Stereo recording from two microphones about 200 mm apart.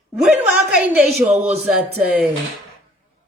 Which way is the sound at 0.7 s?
5° right (ahead or behind).